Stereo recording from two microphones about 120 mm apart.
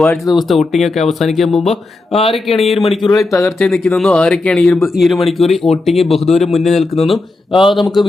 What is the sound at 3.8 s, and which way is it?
Speech, 5° left (ahead or behind).